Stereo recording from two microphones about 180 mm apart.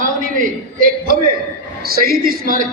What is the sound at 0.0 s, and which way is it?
A man's voice, 50° right (ahead or behind).